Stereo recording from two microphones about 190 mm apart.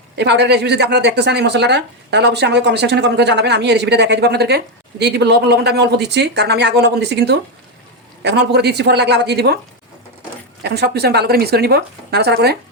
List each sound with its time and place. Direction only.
0.2 s speech: 60° right (ahead or behind)
10.6 s speech: 60° right (ahead or behind)